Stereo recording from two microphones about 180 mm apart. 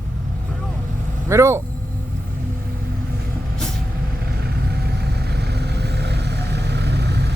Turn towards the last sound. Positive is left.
turn(degrees=-70)  # may be behind; listen again after turning